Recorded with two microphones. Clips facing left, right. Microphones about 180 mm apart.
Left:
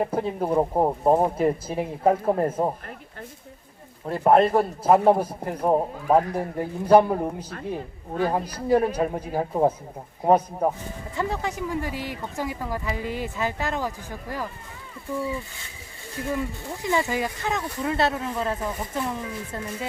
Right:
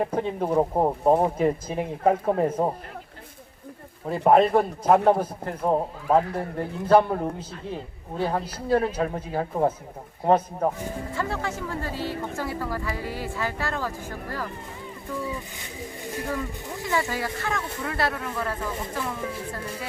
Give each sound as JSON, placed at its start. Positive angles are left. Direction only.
{"t": 0.0, "sound": "speech", "side_deg": 5}
{"t": 4.0, "sound": "a man's voice", "side_deg": 0}
{"t": 16.8, "sound": "speech", "side_deg": 20}